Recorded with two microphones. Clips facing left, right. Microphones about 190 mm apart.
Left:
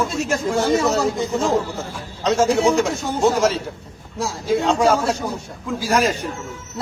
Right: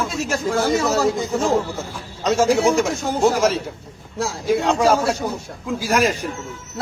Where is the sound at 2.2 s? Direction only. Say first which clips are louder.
Even; 10° right (ahead or behind).